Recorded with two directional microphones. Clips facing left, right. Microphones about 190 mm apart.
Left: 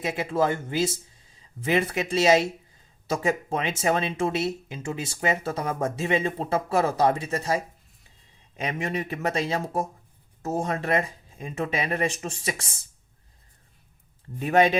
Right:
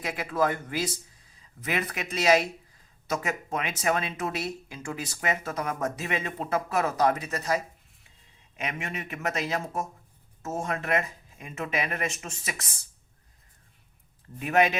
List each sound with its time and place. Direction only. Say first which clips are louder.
0.0 s speech: left 3 dB; 25° left (ahead or behind)
14.3 s speech: left 3 dB; 30° left (ahead or behind)